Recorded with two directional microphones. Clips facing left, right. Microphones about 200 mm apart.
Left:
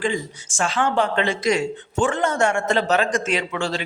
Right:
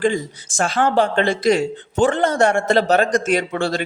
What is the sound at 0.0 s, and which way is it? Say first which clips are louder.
Speech: right 5 dB; 40° right (ahead or behind).